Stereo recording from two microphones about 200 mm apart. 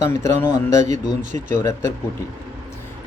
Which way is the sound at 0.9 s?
35° right (ahead or behind).